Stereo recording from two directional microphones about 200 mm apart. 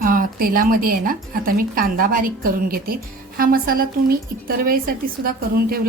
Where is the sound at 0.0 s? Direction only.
45° right (ahead or behind).